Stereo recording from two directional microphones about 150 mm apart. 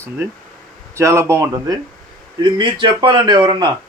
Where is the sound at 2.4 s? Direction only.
30° right (ahead or behind).